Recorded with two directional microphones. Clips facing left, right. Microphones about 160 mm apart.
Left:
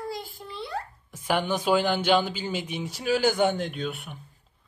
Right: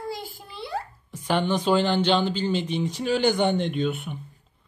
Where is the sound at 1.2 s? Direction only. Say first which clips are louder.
Right 2 dB; 10° left (ahead or behind).